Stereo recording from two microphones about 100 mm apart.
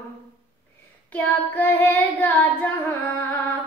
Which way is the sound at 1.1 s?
15° left (ahead or behind).